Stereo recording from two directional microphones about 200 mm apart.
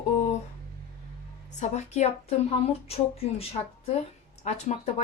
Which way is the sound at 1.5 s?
35° left (ahead or behind).